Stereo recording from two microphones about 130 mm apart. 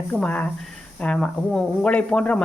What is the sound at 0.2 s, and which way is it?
Speech, 10° left (ahead or behind).